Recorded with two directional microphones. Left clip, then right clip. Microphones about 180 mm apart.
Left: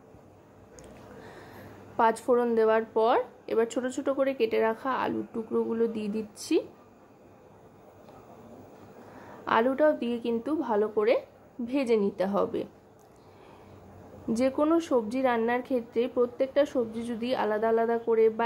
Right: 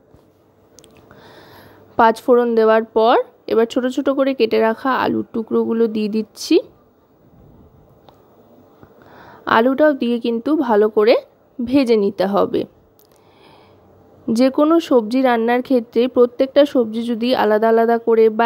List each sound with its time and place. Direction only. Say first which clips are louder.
1.2 s speech: right 7 dB; 40° right (ahead or behind)
9.2 s speech: right 10 dB; 45° right (ahead or behind)
14.3 s speech: right 11 dB; 40° right (ahead or behind)